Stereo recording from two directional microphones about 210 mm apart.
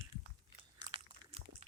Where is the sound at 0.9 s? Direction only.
30° right (ahead or behind).